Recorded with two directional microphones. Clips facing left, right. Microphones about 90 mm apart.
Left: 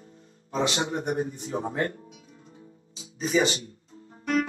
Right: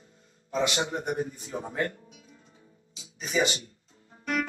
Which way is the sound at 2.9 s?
35° left (ahead or behind).